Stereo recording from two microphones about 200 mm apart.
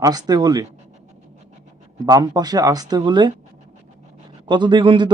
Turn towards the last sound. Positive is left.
turn(degrees=-25)  # may be behind; listen again after turning